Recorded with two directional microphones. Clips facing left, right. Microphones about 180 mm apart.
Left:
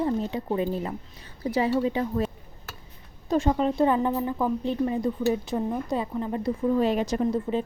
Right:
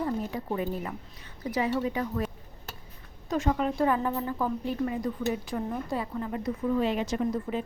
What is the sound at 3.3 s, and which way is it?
A woman's voice, 30° left (ahead or behind).